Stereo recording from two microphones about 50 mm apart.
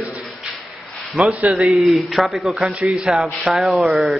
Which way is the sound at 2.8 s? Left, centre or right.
Centre.